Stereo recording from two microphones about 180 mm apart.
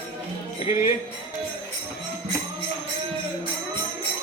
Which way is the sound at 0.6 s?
35° left (ahead or behind).